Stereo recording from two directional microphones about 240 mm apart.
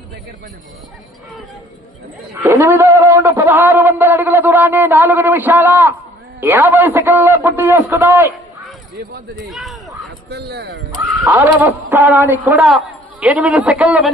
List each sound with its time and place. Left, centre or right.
2.3 s a man's voice: centre
9.5 s speech: centre
10.3 s speech: right
11.2 s a man's voice: centre